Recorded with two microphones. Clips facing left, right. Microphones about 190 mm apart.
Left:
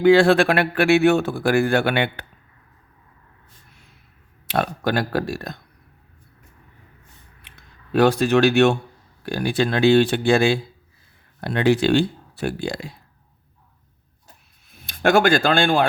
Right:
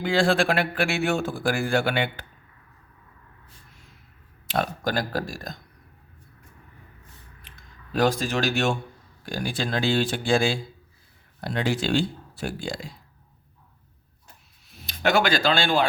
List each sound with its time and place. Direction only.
0.0 s a man's voice: 65° left (ahead or behind)
4.4 s a man's voice: 65° left (ahead or behind)
7.4 s a man's voice: 65° left (ahead or behind)
14.7 s speech: 50° left (ahead or behind)